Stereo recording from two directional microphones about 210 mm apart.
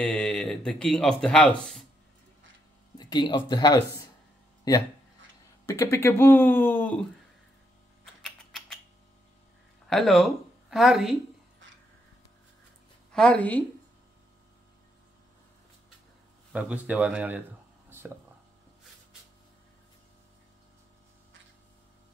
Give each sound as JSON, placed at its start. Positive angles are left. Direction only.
{"t": 0.0, "sound": "speech", "side_deg": 5}
{"t": 3.0, "sound": "speech", "side_deg": 20}
{"t": 8.0, "sound": "typing", "side_deg": 0}
{"t": 9.8, "sound": "speech", "side_deg": 0}
{"t": 13.1, "sound": "speech", "side_deg": 5}
{"t": 16.5, "sound": "speech", "side_deg": -5}
{"t": 17.8, "sound": "whispering", "side_deg": -10}